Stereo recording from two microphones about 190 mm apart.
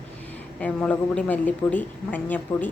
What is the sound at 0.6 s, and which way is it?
A woman's voice, 5° left (ahead or behind).